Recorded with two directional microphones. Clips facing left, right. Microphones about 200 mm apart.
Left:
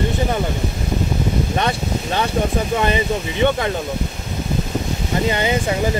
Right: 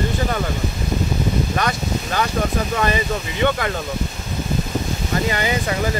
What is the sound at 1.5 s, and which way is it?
Speech, 25° left (ahead or behind).